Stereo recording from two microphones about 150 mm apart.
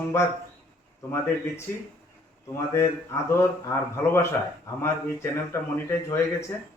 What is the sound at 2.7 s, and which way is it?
A man's voice, 20° left (ahead or behind).